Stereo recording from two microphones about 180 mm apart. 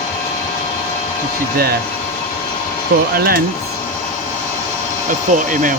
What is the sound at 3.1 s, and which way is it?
Speech, 55° right (ahead or behind).